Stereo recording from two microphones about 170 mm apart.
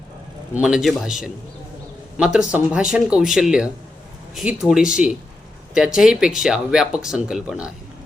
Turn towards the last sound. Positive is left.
turn(degrees=-5)  # may be behind; listen again after turning